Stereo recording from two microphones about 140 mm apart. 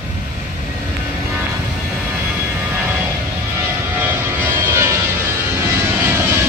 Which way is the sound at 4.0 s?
15° right (ahead or behind).